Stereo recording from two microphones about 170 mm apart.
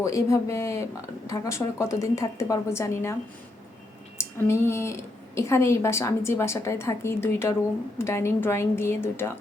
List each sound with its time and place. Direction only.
0.0 s a woman's voice: 20° left (ahead or behind)
4.2 s a woman's voice: 15° left (ahead or behind)